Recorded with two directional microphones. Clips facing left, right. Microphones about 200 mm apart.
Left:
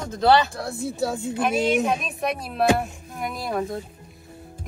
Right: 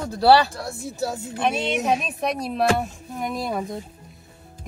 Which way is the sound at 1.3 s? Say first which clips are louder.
Left 3 dB; 5° left (ahead or behind).